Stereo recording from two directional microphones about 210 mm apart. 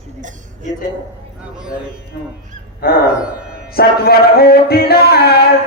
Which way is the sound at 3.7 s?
45° left (ahead or behind).